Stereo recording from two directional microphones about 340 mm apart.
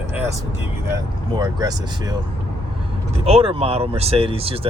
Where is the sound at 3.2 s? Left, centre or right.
Centre.